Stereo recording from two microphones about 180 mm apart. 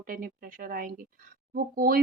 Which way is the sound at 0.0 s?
50° right (ahead or behind).